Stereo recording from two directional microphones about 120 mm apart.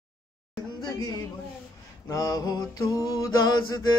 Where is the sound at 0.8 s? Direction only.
30° left (ahead or behind).